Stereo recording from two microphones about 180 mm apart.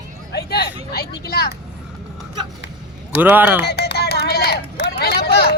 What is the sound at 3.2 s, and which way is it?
Speech, 10° right (ahead or behind).